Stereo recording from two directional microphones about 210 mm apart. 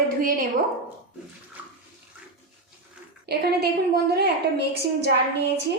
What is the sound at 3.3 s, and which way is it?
A woman's voice, 50° right (ahead or behind).